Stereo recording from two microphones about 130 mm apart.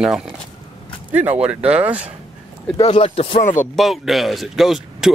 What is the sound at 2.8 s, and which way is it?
Speech, 45° left (ahead or behind).